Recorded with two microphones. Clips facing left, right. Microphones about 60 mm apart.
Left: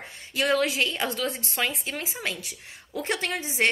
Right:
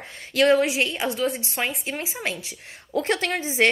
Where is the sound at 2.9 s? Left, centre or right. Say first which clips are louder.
Right 5 dB; right.